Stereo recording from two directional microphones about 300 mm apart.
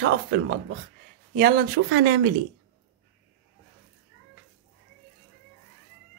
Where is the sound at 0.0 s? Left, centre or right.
Right.